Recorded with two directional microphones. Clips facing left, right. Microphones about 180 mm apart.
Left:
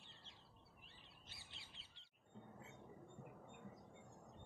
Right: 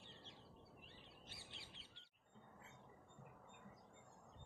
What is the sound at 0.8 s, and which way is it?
Bird vocalization, 55° right (ahead or behind).